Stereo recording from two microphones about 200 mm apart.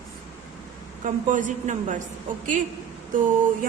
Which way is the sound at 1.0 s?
40° right (ahead or behind).